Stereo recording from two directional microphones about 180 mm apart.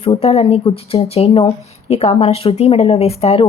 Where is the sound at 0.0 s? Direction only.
35° left (ahead or behind).